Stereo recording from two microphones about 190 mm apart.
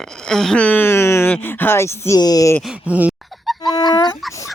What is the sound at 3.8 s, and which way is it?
Speech, 20° left (ahead or behind).